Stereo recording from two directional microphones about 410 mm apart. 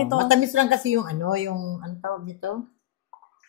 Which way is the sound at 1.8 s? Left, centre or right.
Right.